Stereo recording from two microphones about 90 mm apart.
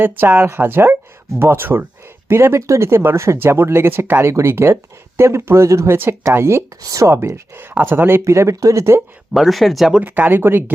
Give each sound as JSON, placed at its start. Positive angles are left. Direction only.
{"t": 0.0, "sound": "speech", "side_deg": -25}
{"t": 9.3, "sound": "speech", "side_deg": 0}
{"t": 10.0, "sound": "speech", "side_deg": -20}